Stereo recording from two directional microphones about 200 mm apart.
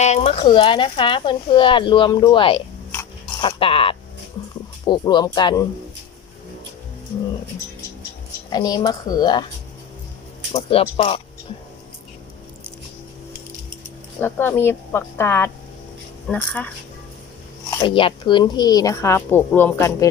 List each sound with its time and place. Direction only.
0.0 s speech: 35° left (ahead or behind)
8.5 s speech: 20° left (ahead or behind)
10.5 s speech: 30° left (ahead or behind)
14.2 s speech: 10° left (ahead or behind)
17.7 s speech: 20° left (ahead or behind)